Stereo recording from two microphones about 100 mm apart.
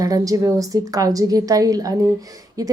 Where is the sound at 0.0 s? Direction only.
35° right (ahead or behind).